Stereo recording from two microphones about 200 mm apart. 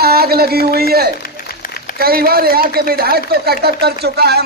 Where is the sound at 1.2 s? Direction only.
50° left (ahead or behind).